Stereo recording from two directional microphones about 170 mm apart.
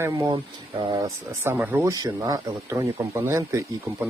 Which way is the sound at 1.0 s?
15° right (ahead or behind).